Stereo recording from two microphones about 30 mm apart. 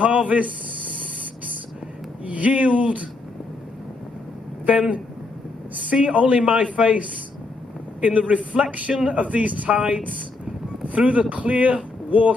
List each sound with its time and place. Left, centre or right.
0.0 s a man's voice: right
2.2 s speech: right
4.6 s speech: right
6.1 s speech: right
8.0 s speech: right
8.9 s speech: right
9.2 s speech: right
9.7 s speech: right
10.9 s speech: right
12.1 s speech: right